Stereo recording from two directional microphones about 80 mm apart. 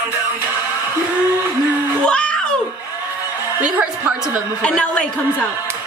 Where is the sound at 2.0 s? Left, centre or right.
Centre.